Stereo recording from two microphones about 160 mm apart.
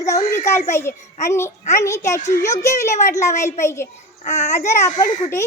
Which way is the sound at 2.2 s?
50° left (ahead or behind).